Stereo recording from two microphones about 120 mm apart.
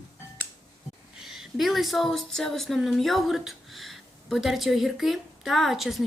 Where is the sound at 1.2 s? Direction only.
5° right (ahead or behind).